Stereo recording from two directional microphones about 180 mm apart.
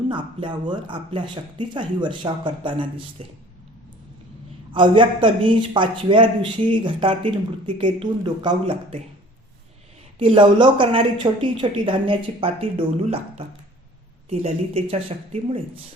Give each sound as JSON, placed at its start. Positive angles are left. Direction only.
{"t": 0.1, "sound": "a woman's voice", "side_deg": -25}
{"t": 4.7, "sound": "a woman's voice", "side_deg": -25}
{"t": 10.2, "sound": "a woman's voice", "side_deg": -30}